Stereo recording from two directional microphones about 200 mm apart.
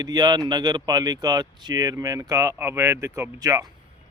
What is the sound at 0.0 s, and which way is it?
Speech, 20° right (ahead or behind).